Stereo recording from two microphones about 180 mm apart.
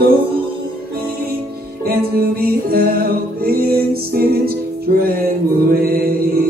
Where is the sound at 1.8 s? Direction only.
55° right (ahead or behind).